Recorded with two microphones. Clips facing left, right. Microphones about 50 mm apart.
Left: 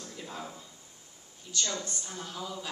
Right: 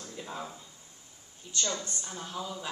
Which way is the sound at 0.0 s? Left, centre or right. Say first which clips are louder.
Right 1 dB; right.